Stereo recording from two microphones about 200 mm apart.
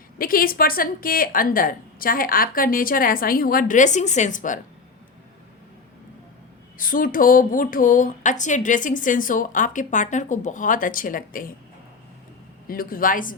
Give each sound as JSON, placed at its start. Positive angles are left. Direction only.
{"t": 0.2, "sound": "a woman's voice", "side_deg": 45}
{"t": 6.7, "sound": "speech", "side_deg": 45}
{"t": 12.6, "sound": "a woman's voice", "side_deg": 45}